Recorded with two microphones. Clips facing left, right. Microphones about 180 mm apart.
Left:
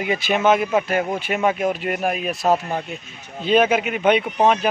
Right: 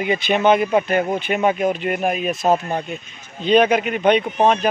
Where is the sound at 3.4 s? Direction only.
5° left (ahead or behind).